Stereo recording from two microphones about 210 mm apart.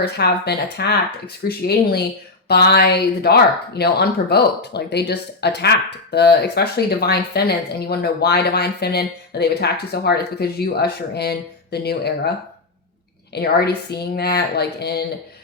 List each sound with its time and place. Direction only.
0.0 s speech: 50° left (ahead or behind)
13.3 s speech: 50° left (ahead or behind)